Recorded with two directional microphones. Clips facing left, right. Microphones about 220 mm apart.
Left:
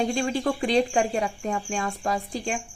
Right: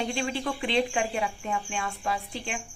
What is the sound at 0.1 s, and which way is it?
Speech, 40° left (ahead or behind).